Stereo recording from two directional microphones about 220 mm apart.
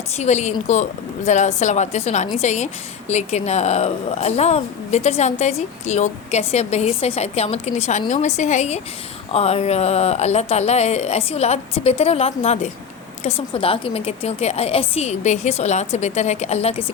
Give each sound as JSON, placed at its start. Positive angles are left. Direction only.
{"t": 0.2, "sound": "a woman's voice", "side_deg": 30}